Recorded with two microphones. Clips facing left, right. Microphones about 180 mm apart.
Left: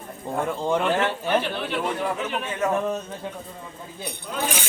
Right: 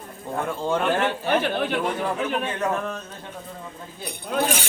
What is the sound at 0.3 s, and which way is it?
Cowbell, 15° left (ahead or behind).